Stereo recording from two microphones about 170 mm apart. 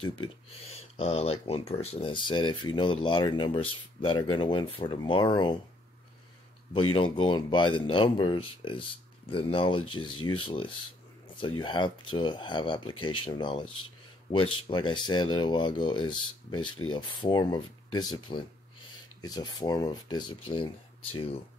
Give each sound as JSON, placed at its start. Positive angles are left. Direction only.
{"t": 0.0, "sound": "speech", "side_deg": 35}
{"t": 6.7, "sound": "speech", "side_deg": 30}